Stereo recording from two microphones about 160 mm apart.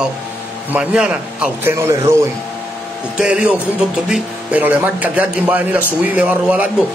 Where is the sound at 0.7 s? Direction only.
5° right (ahead or behind).